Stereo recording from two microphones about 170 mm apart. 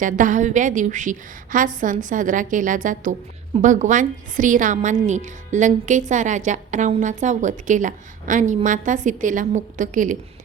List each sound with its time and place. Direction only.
0.0 s a woman's voice: 50° right (ahead or behind)